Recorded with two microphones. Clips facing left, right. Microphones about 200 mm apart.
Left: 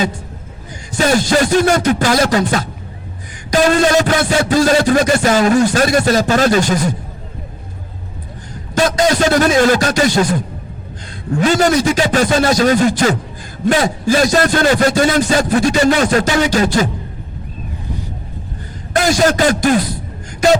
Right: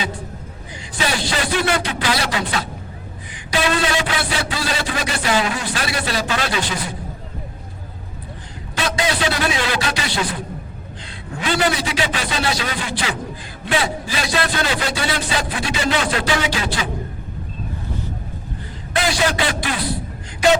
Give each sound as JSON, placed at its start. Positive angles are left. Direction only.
{"t": 0.9, "sound": "speech", "side_deg": 45}
{"t": 8.7, "sound": "speech", "side_deg": 45}
{"t": 11.3, "sound": "speech", "side_deg": 45}
{"t": 18.9, "sound": "speech", "side_deg": 45}